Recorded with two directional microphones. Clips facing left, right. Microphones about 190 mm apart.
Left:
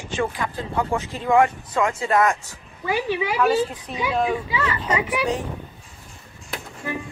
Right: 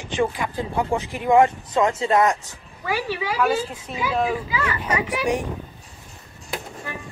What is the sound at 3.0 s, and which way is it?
Speech, 20° left (ahead or behind).